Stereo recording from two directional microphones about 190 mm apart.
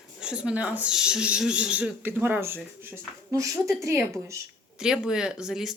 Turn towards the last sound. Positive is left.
turn(degrees=0)  # may be behind; listen again after turning